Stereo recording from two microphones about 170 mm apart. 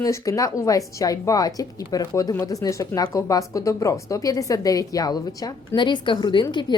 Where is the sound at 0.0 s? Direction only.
20° left (ahead or behind).